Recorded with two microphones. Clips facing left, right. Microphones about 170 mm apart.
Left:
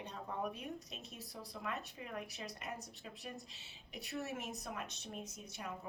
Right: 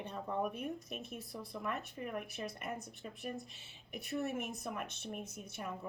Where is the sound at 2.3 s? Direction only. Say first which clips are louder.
Right 4 dB; 55° right (ahead or behind).